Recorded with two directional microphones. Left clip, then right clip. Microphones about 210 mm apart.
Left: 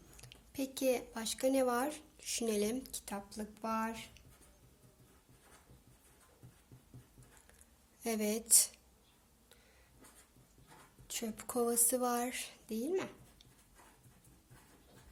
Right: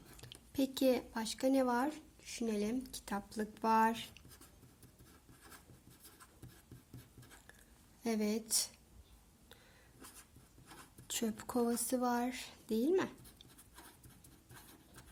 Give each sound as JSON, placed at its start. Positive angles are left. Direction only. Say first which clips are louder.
{"t": 0.2, "sound": "speech", "louder": "right 4 dB", "side_deg": -25}
{"t": 2.9, "sound": "speech", "louder": "right 2 dB", "side_deg": -20}
{"t": 8.0, "sound": "a woman's voice", "louder": "left 1 dB", "side_deg": -15}
{"t": 11.1, "sound": "speech", "louder": "right 1 dB", "side_deg": -30}